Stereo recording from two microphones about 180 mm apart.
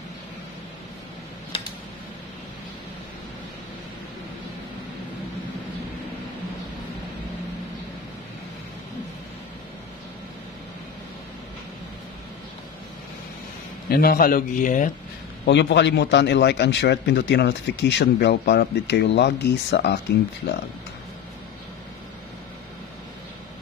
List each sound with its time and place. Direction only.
13.8 s a man's voice: 55° left (ahead or behind)
15.4 s a man's voice: 70° left (ahead or behind)